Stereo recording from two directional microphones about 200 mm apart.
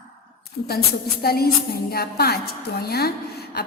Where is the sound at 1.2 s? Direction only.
50° left (ahead or behind).